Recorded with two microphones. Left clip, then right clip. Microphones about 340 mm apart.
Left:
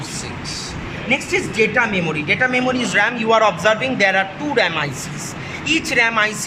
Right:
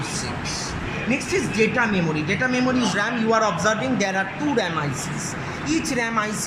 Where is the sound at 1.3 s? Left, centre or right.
Left.